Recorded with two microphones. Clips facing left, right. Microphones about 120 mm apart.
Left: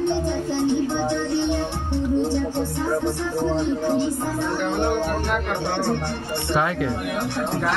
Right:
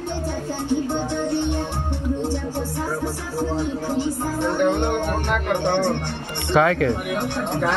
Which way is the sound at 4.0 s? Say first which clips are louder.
Even; 15° right (ahead or behind).